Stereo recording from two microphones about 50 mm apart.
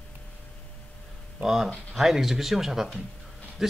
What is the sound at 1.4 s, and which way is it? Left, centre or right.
Speech, centre.